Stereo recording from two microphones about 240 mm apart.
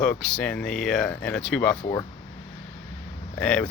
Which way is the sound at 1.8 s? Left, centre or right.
Centre.